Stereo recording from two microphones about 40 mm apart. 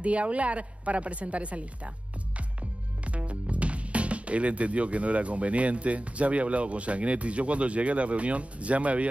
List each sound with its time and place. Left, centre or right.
0.0 s speech: right
3.1 s speech: right